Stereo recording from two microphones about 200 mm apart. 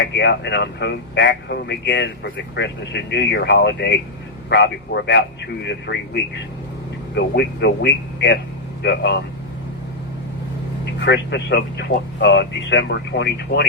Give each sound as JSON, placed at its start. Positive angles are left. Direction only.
{"t": 0.0, "sound": "speech", "side_deg": 60}
{"t": 11.0, "sound": "speech", "side_deg": 60}